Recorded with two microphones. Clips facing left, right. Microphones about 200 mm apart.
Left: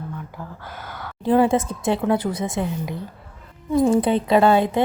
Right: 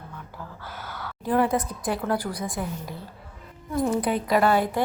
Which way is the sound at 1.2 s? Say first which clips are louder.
Left 6 dB; 30° left (ahead or behind).